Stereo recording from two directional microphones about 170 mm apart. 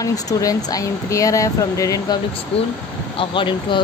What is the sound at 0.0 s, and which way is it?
Speech, 20° left (ahead or behind).